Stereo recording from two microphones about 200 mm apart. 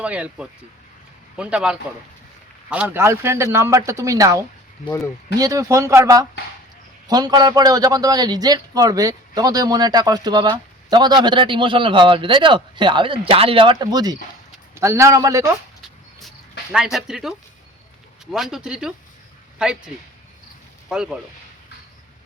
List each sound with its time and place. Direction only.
0.0 s a man's voice: 5° right (ahead or behind)
16.7 s speech: 5° right (ahead or behind)
20.9 s speech: 5° right (ahead or behind)